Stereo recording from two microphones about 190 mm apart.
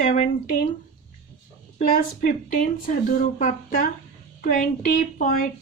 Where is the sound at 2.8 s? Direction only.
45° left (ahead or behind).